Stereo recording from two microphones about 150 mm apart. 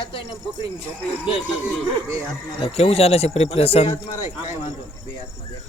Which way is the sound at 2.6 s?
40° left (ahead or behind).